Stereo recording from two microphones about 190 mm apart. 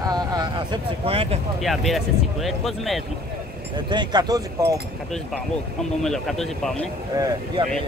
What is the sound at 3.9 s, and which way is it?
Speech, 20° right (ahead or behind).